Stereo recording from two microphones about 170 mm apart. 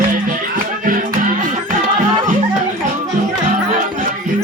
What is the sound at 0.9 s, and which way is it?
Music, 55° right (ahead or behind).